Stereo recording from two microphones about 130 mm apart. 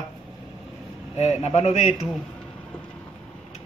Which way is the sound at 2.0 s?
Centre (ahead or behind).